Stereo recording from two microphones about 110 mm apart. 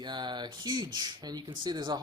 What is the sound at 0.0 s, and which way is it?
Speech, 45° right (ahead or behind).